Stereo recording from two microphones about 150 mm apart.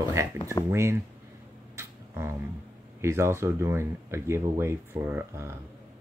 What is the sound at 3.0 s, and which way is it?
Speech, 15° right (ahead or behind).